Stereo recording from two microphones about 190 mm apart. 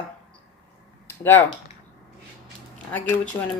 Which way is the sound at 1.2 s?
10° left (ahead or behind).